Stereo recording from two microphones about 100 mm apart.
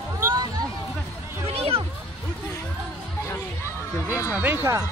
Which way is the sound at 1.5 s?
70° right (ahead or behind).